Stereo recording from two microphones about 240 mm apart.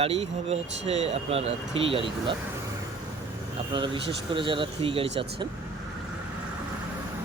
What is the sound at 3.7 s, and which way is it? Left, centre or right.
Speech, centre.